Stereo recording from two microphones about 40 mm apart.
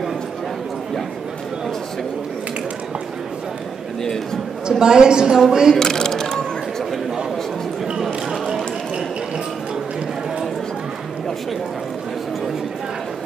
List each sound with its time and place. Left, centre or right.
4.6 s a woman's voice: centre
5.8 s music: centre